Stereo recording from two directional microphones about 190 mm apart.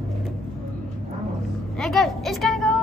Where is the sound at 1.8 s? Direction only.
Centre (ahead or behind).